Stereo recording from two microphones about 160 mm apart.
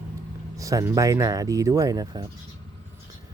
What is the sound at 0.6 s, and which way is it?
Speech, 20° right (ahead or behind).